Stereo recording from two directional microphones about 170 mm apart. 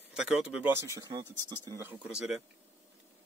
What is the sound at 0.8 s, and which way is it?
Speech, 20° right (ahead or behind).